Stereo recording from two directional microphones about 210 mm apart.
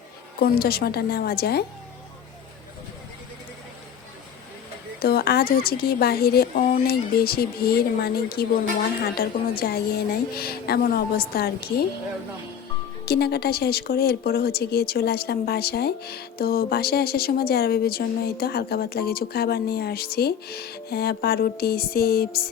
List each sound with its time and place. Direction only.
0.3 s speech: 45° left (ahead or behind)
4.9 s speech: 45° left (ahead or behind)
13.1 s speech: 50° left (ahead or behind)